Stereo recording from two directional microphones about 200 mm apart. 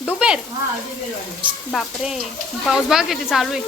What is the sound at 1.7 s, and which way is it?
Speech, centre (ahead or behind).